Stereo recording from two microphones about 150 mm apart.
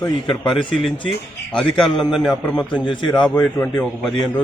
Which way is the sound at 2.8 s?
30° left (ahead or behind).